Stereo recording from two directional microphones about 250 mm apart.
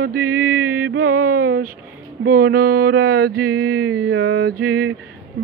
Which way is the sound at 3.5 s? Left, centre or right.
Right.